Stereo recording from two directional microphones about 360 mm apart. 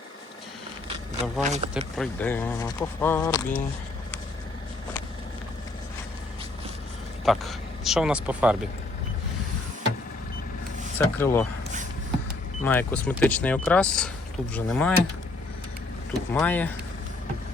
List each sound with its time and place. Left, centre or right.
1.5 s speech: centre
2.0 s speech: centre
7.3 s speech: centre
10.9 s speech: centre
12.6 s speech: centre
16.1 s speech: centre